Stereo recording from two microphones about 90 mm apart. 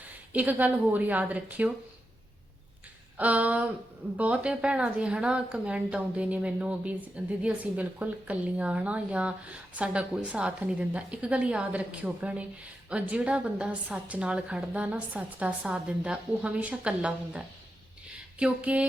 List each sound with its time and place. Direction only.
0.0 s a woman's voice: 15° right (ahead or behind)
3.2 s speech: 15° right (ahead or behind)